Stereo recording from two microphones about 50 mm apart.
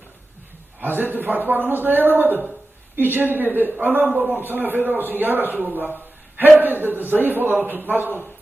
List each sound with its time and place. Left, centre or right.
0.8 s a man's voice: right